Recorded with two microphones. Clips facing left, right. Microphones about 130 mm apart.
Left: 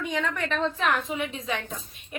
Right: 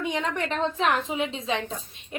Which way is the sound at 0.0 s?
25° right (ahead or behind).